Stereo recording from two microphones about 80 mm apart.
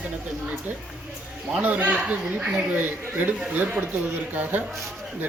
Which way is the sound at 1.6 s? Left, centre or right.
Centre.